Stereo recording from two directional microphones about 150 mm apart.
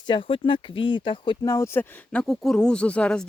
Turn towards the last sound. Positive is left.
turn(degrees=5)  # may be behind; listen again after turning